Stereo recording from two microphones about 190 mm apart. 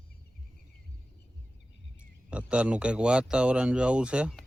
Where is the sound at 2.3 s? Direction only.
5° right (ahead or behind).